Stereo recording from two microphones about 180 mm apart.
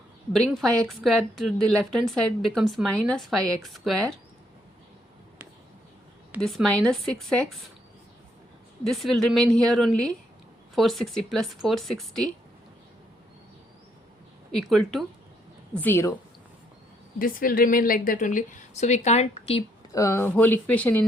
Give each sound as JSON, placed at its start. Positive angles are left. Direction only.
{"t": 0.3, "sound": "a woman's voice", "side_deg": 0}
{"t": 6.4, "sound": "a woman's voice", "side_deg": 0}
{"t": 8.8, "sound": "a woman's voice", "side_deg": 0}
{"t": 14.5, "sound": "a woman's voice", "side_deg": 0}
{"t": 17.2, "sound": "a woman's voice", "side_deg": 50}
{"t": 19.9, "sound": "speech", "side_deg": 15}